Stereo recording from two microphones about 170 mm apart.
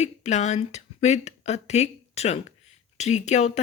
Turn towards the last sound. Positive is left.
turn(degrees=40)  # may be behind; listen again after turning